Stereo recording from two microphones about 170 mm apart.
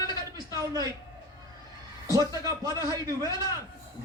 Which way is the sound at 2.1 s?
20° right (ahead or behind).